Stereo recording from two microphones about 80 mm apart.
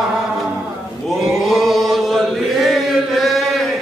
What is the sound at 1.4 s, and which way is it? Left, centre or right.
Chant, centre.